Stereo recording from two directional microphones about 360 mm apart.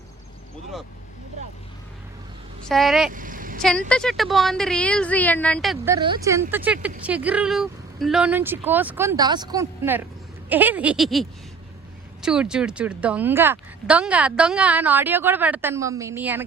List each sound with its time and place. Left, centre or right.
2.6 s a woman's voice: centre
3.1 s vehicle: right
3.6 s a woman's voice: centre